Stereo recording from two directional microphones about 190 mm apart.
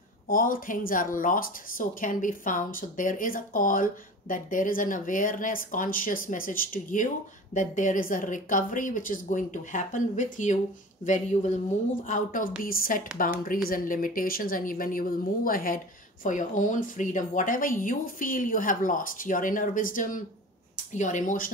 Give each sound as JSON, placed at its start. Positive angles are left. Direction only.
{"t": 0.3, "sound": "speech", "side_deg": 45}